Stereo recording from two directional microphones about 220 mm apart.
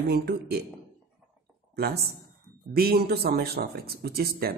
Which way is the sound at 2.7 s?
45° right (ahead or behind).